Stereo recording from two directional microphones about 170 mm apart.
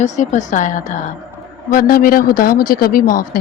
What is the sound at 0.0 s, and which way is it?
Speech, 45° left (ahead or behind).